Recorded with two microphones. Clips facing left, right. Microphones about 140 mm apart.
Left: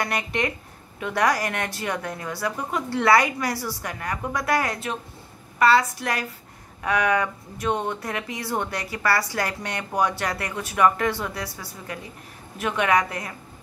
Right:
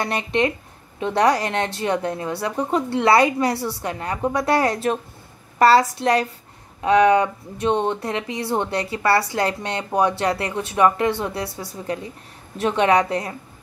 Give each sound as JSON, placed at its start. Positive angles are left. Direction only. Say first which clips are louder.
{"t": 0.0, "sound": "a woman's voice", "louder": "right 5 dB", "side_deg": -25}